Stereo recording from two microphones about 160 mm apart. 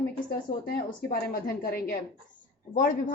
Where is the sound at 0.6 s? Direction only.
75° left (ahead or behind).